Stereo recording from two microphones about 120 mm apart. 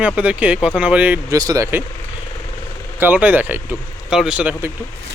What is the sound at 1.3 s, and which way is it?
Speech, 30° right (ahead or behind).